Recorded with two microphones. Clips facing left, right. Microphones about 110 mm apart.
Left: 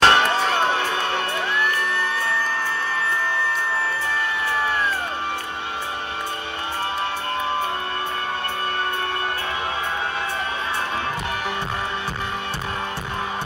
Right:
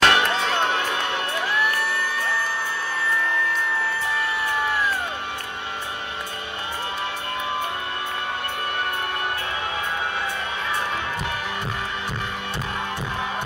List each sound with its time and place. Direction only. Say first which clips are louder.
0.0 s chop: left 3 dB; 30° left (ahead or behind)
0.7 s crowd: left 2 dB; 30° left (ahead or behind)